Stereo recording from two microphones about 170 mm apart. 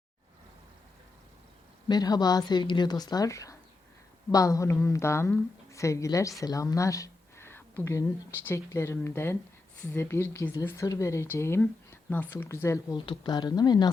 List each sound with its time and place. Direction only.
1.9 s speech: 25° left (ahead or behind)